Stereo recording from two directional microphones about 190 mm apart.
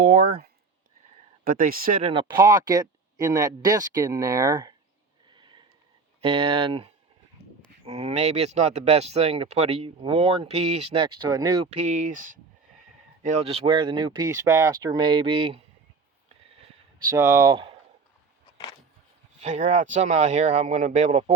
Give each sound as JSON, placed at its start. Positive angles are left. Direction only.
{"t": 0.0, "sound": "speech", "side_deg": -50}
{"t": 1.5, "sound": "speech", "side_deg": -45}
{"t": 2.3, "sound": "speech", "side_deg": -15}
{"t": 5.3, "sound": "a sound", "side_deg": -25}
{"t": 6.2, "sound": "speech", "side_deg": -30}
{"t": 11.8, "sound": "speech", "side_deg": -40}
{"t": 13.2, "sound": "speech", "side_deg": -35}
{"t": 17.1, "sound": "speech", "side_deg": -15}
{"t": 19.4, "sound": "speech", "side_deg": -40}